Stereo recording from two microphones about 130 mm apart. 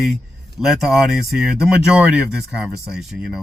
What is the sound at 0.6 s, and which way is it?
A man's voice, 5° right (ahead or behind).